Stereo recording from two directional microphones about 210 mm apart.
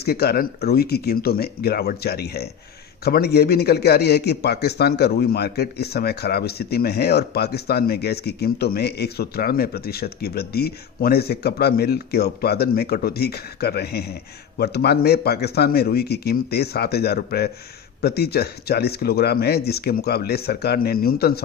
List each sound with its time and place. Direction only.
0.0 s a man's voice: 50° left (ahead or behind)